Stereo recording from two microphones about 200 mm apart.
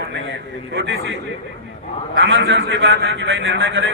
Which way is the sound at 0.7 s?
65° right (ahead or behind).